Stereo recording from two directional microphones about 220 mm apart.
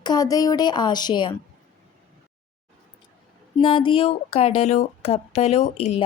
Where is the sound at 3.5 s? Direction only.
25° left (ahead or behind).